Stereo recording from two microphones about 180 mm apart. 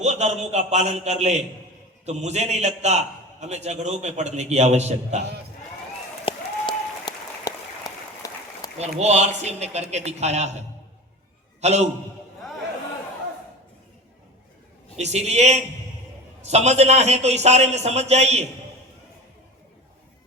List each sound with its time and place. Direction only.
0.0 s a man's voice: 40° right (ahead or behind)
6.2 s applause: 25° left (ahead or behind)
9.0 s a man's voice: 40° right (ahead or behind)
11.6 s a man's voice: 40° right (ahead or behind)
14.9 s a man's voice: 40° right (ahead or behind)